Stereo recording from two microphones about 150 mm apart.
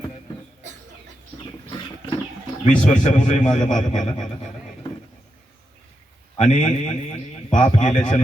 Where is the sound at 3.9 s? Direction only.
45° left (ahead or behind).